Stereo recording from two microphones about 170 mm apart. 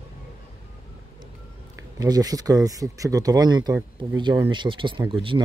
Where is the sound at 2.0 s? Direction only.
20° right (ahead or behind).